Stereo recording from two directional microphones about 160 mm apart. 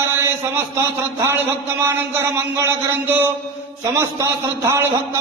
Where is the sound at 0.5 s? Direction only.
15° right (ahead or behind).